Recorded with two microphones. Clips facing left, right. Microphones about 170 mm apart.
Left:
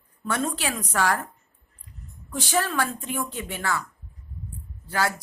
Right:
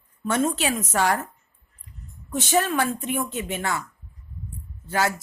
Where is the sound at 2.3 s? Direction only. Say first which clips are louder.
Right 3 dB; 20° right (ahead or behind).